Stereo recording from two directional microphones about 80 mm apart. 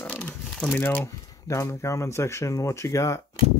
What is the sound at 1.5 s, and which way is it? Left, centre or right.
Speech, left.